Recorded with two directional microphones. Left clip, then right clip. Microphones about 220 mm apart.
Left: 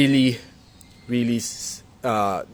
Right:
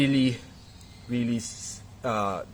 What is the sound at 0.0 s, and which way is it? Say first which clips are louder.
A man's voice: left 6 dB; 35° left (ahead or behind).